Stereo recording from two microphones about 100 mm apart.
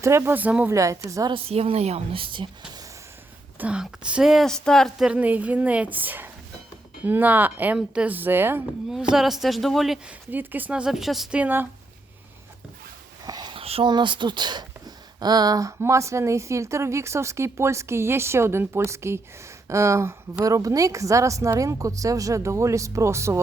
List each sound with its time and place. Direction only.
0.0 s speech: 25° right (ahead or behind)
0.7 s speech: 30° right (ahead or behind)
1.3 s a woman's voice: 75° right (ahead or behind)
3.6 s speech: 10° right (ahead or behind)
5.0 s a woman's voice: 15° right (ahead or behind)
8.9 s speech: 5° right (ahead or behind)
10.1 s a woman's voice: 15° right (ahead or behind); by 11.3 s centre (ahead or behind)
11.3 s speech: 20° right (ahead or behind)
13.2 s sniff: 40° right (ahead or behind)
13.5 s a sound: 75° right (ahead or behind)
13.8 s speech: 50° right (ahead or behind); by 23.4 s 30° right (ahead or behind)